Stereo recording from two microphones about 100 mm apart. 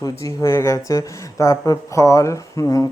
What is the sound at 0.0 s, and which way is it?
Speech, 30° left (ahead or behind).